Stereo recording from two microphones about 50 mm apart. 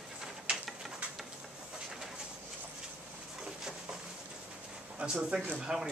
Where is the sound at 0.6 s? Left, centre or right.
Centre.